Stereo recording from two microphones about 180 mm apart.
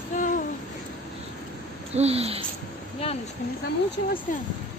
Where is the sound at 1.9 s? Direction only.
35° right (ahead or behind).